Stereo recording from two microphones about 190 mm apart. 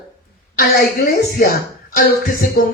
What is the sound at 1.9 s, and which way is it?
Speech, 45° left (ahead or behind).